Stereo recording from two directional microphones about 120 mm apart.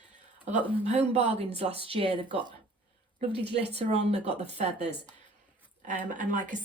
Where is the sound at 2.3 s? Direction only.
40° right (ahead or behind).